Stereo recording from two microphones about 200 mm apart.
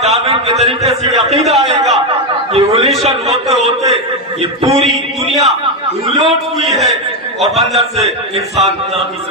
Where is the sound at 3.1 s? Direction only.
30° right (ahead or behind).